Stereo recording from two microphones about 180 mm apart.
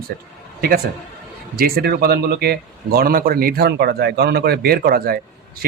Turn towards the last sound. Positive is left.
turn(degrees=-55)  # may be behind; listen again after turning